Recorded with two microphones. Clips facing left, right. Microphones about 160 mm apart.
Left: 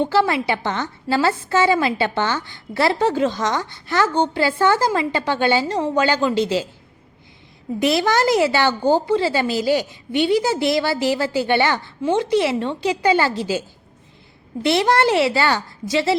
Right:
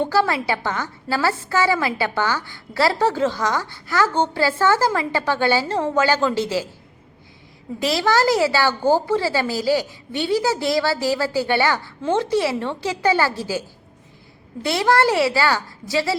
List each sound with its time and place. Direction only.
0.0 s a woman's voice: 20° left (ahead or behind)
7.8 s a woman's voice: 20° left (ahead or behind)